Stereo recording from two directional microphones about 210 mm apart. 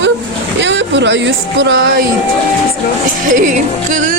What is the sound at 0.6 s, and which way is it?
Speech, 60° right (ahead or behind).